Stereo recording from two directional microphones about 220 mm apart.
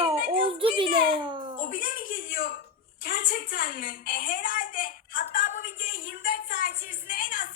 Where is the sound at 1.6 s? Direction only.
40° left (ahead or behind).